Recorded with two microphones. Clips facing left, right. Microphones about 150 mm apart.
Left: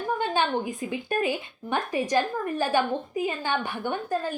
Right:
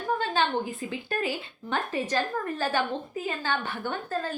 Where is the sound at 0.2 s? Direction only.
15° left (ahead or behind).